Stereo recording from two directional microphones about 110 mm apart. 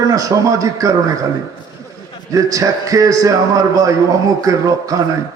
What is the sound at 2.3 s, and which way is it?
A man's voice, 30° right (ahead or behind).